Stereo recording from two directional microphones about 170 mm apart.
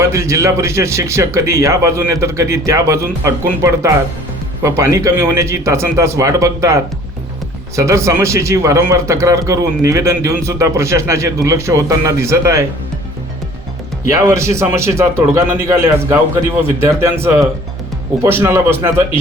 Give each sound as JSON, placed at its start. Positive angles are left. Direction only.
{"t": 0.0, "sound": "a man's voice", "side_deg": -15}
{"t": 7.8, "sound": "a man's voice", "side_deg": -15}
{"t": 14.1, "sound": "a man's voice", "side_deg": -15}